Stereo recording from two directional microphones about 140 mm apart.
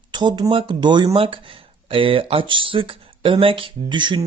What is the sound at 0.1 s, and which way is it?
Speech, 30° right (ahead or behind).